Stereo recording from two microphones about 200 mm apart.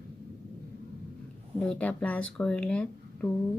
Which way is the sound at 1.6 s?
5° left (ahead or behind).